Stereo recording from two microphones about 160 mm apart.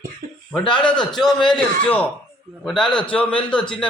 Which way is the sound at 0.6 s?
30° left (ahead or behind).